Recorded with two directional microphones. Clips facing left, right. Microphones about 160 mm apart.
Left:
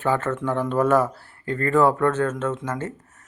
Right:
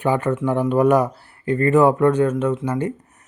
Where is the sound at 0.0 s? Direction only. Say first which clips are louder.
Right 3 dB; 15° right (ahead or behind).